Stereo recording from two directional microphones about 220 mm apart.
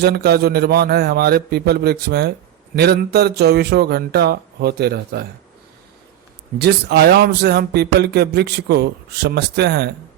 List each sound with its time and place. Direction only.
0.0 s a man's voice: 45° right (ahead or behind)
6.6 s a man's voice: 50° right (ahead or behind)